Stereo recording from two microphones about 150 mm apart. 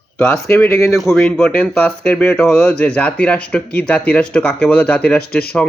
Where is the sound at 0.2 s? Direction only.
15° left (ahead or behind).